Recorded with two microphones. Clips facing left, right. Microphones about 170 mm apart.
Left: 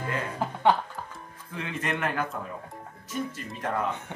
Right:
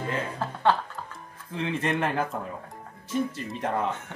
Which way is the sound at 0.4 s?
15° left (ahead or behind).